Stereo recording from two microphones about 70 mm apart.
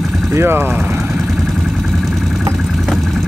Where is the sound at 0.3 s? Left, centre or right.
Right.